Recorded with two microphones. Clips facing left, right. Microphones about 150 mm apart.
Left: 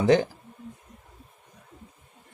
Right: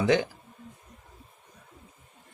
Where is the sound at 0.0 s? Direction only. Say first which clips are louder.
Left 4 dB; 40° left (ahead or behind).